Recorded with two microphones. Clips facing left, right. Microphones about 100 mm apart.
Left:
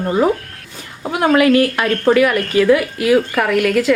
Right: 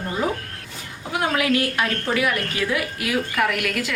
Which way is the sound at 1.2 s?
55° left (ahead or behind).